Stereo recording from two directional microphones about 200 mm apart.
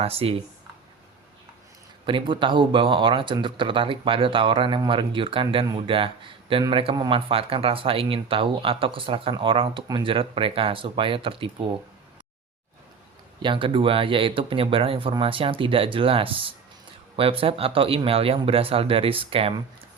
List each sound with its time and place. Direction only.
0.0 s speech: 30° right (ahead or behind)
2.0 s speech: 25° right (ahead or behind)
13.4 s speech: 25° right (ahead or behind)